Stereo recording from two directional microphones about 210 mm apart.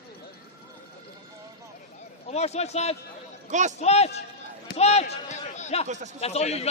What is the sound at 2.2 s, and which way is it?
A man's voice, 30° left (ahead or behind).